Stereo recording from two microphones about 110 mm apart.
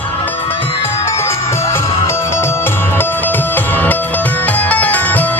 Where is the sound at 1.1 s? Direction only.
25° left (ahead or behind).